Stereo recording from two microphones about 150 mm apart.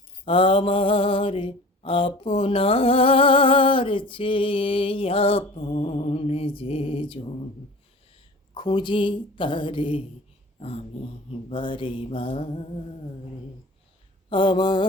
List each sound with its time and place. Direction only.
0.3 s mantra: 35° left (ahead or behind)
10.6 s dog: 45° left (ahead or behind)
11.3 s mantra: 40° left (ahead or behind)
14.3 s mantra: 30° left (ahead or behind)